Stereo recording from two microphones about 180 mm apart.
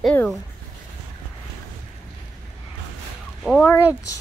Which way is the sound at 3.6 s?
15° left (ahead or behind).